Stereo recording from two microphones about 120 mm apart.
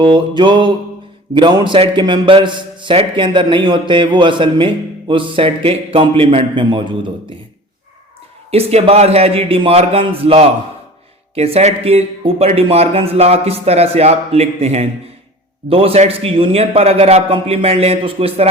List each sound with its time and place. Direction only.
0.0 s a man's voice: 40° right (ahead or behind)
8.4 s speech: 55° right (ahead or behind)